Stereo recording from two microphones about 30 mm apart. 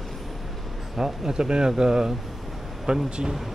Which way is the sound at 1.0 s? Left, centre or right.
Right.